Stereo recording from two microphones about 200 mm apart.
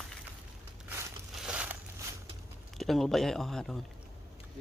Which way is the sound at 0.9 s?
15° right (ahead or behind).